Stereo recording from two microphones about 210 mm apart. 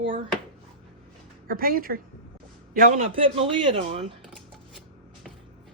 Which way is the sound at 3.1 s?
25° right (ahead or behind).